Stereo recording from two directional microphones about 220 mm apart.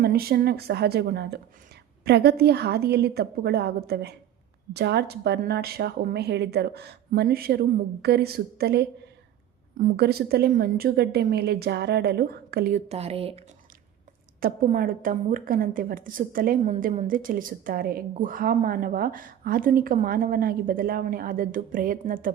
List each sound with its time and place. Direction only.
0.0 s speech: 45° right (ahead or behind); by 13.4 s 25° right (ahead or behind)
14.4 s a woman's voice: 40° right (ahead or behind)